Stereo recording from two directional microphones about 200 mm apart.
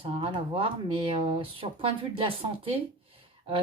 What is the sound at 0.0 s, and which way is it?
Speech, 25° right (ahead or behind).